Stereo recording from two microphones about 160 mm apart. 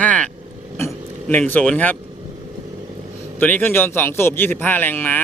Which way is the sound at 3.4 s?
10° left (ahead or behind).